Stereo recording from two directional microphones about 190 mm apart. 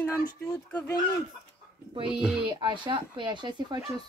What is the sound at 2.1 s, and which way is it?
Speech, 5° right (ahead or behind).